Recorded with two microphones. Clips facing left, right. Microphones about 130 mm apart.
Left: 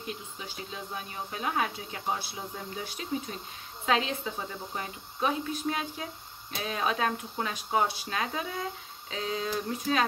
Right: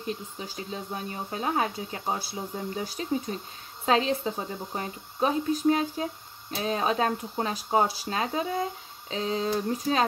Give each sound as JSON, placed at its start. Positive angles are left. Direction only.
{"t": 0.0, "sound": "speech", "side_deg": -35}